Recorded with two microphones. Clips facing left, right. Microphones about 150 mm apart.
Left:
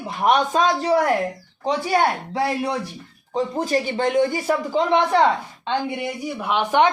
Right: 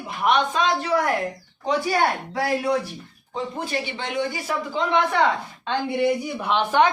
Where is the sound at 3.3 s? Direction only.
40° left (ahead or behind).